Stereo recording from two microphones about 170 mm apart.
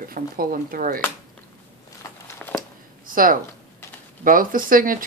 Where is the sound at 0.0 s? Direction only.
55° right (ahead or behind).